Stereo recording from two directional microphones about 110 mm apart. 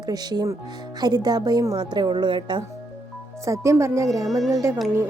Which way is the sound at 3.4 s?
30° right (ahead or behind).